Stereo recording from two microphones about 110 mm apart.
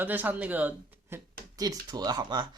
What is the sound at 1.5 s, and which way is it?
Speech, 35° right (ahead or behind).